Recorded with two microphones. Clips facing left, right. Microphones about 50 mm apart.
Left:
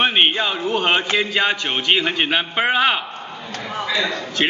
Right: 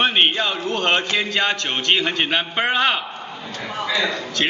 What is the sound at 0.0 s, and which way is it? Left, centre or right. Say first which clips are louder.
A man's voice: left 1 dB; centre.